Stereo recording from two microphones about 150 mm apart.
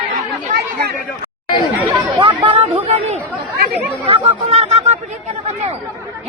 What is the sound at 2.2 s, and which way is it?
Chatter, 35° right (ahead or behind).